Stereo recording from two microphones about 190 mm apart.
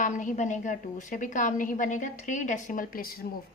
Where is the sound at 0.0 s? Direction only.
40° left (ahead or behind).